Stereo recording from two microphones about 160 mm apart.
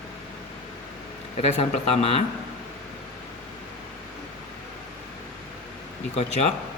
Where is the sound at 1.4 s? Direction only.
40° left (ahead or behind).